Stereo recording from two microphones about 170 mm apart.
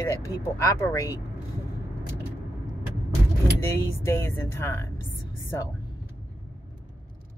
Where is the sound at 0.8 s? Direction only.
10° left (ahead or behind).